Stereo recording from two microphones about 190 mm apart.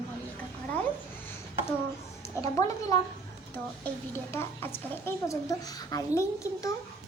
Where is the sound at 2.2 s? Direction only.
15° left (ahead or behind).